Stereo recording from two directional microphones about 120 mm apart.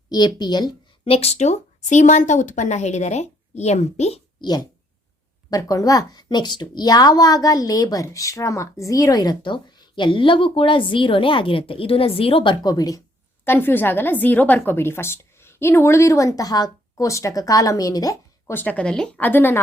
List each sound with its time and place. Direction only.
0.1 s a woman's voice: 35° left (ahead or behind)
1.1 s speech: 60° left (ahead or behind)
4.4 s a child's voice: 35° left (ahead or behind)
12.6 s speech: 30° left (ahead or behind)
13.4 s a woman's voice: 20° left (ahead or behind)
18.5 s a woman's voice: 10° left (ahead or behind)